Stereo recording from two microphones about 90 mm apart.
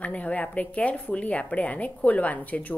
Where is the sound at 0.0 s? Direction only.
15° left (ahead or behind).